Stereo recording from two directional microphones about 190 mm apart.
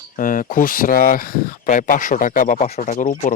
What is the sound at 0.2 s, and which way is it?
Speech, 45° left (ahead or behind).